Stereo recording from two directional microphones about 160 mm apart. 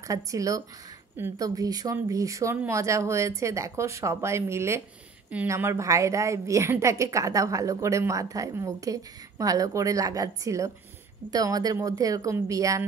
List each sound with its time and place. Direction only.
0.1 s a woman's voice: 20° right (ahead or behind)